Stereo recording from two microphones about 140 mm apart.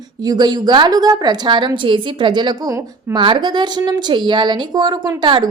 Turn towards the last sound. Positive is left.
turn(degrees=-35)  # may be behind; listen again after turning